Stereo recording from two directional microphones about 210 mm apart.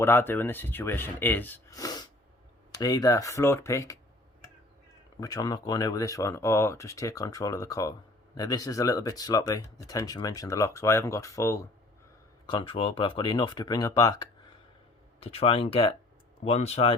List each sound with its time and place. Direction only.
0.0 s speech: 10° left (ahead or behind)
5.2 s speech: 20° left (ahead or behind)
12.5 s speech: 25° left (ahead or behind)
15.2 s speech: 30° left (ahead or behind)